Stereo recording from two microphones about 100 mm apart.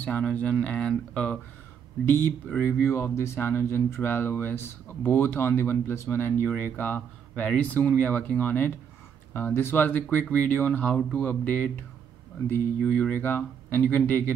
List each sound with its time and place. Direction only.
0.0 s speech: 15° left (ahead or behind)
2.0 s speech: 20° left (ahead or behind)